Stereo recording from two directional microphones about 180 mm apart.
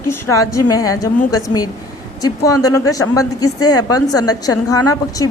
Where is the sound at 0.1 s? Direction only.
15° left (ahead or behind).